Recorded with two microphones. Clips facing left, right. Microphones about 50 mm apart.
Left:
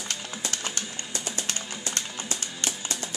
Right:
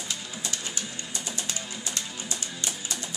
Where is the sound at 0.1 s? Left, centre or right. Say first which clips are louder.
Left 2 dB; left.